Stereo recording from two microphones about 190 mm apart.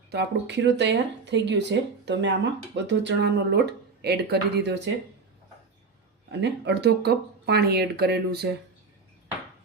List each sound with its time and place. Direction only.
0.1 s speech: 60° right (ahead or behind)
6.4 s speech: 60° right (ahead or behind)